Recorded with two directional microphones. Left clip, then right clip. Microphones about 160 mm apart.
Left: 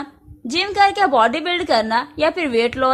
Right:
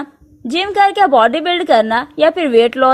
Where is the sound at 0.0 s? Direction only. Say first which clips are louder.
Right 4 dB; 30° right (ahead or behind).